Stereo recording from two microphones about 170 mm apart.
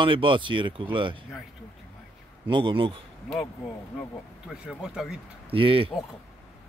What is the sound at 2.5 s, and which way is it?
Speech, 30° right (ahead or behind).